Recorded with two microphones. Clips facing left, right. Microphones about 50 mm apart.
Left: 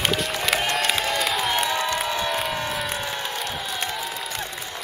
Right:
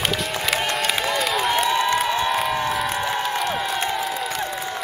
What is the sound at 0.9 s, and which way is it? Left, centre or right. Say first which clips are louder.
Crowd: right 2 dB; centre.